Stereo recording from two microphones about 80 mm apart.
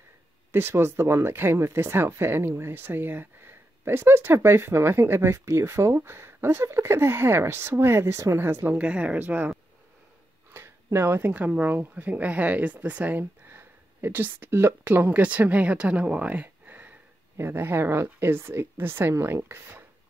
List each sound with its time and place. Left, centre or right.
0.5 s speech: right
10.5 s speech: right